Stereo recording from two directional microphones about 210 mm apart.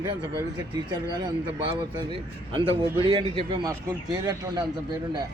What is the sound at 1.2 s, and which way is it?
A man's voice, 20° right (ahead or behind).